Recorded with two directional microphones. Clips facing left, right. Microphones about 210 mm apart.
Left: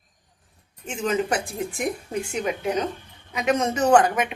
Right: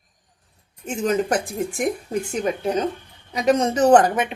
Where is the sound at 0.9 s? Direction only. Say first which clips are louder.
Right 3 dB; 40° right (ahead or behind).